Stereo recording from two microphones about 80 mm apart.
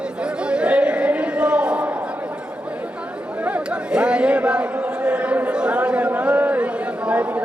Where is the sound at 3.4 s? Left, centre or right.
Centre.